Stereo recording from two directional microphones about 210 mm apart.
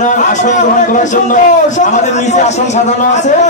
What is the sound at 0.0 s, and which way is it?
Speech, 35° left (ahead or behind).